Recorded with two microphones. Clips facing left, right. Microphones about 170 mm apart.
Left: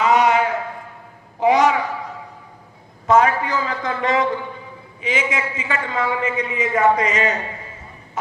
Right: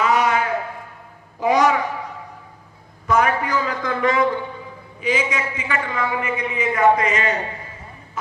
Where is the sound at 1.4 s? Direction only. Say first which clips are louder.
Left 2 dB; 20° left (ahead or behind).